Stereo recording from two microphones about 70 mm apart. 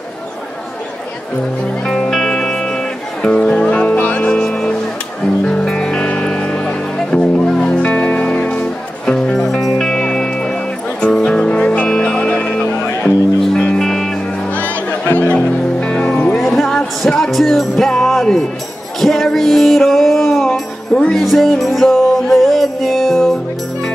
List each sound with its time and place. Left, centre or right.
1.9 s music: centre
14.5 s music: left
15.3 s music: centre